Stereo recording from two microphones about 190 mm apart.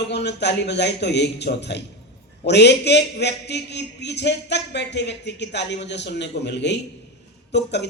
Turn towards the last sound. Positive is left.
turn(degrees=65)  # may be behind; listen again after turning